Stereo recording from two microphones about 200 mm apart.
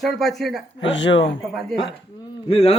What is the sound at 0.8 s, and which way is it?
Speech, 65° left (ahead or behind).